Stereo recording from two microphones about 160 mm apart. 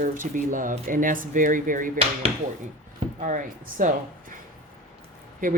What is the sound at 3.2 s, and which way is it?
Speech, 55° right (ahead or behind).